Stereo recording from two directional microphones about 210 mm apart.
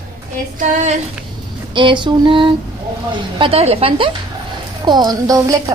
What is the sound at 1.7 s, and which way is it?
A woman's voice, 25° right (ahead or behind).